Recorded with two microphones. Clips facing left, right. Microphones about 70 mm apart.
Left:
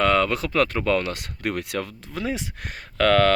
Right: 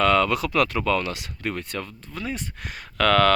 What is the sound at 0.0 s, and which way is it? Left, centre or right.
Speech, left.